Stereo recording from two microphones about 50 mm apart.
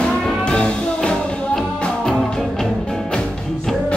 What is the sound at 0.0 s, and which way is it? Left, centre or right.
Music, centre.